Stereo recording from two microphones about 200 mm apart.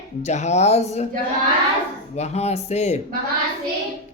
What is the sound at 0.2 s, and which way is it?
Speech, 35° left (ahead or behind).